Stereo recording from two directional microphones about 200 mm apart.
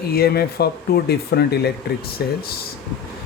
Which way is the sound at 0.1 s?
50° left (ahead or behind).